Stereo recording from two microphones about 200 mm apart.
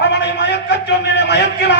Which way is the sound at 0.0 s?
60° left (ahead or behind).